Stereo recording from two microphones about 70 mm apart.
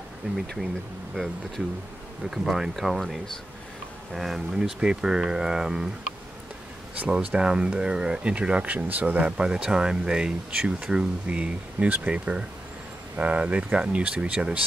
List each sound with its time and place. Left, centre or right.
2.3 s speech: centre
7.0 s speech: centre